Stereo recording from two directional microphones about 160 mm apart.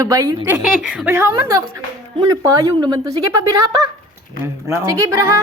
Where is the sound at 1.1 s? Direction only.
20° right (ahead or behind).